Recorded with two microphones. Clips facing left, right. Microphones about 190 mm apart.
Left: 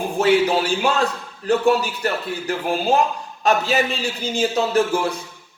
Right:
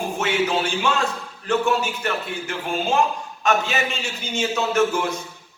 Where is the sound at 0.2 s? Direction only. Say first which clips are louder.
Left 6 dB; 35° left (ahead or behind).